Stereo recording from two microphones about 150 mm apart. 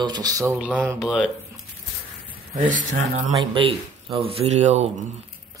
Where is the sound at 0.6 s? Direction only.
10° right (ahead or behind).